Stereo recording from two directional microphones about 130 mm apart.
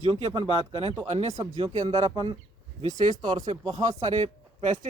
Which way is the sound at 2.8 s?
70° right (ahead or behind).